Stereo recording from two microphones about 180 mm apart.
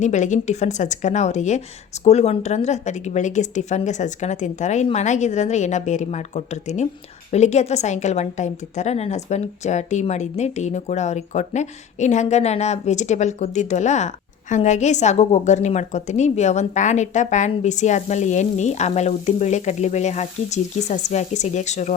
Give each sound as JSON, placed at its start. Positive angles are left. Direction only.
{"t": 0.0, "sound": "a woman's voice", "side_deg": 40}